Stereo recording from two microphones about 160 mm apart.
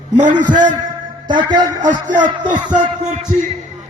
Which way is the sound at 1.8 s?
55° right (ahead or behind).